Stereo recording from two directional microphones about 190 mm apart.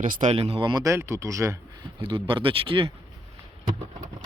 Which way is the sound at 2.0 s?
25° right (ahead or behind).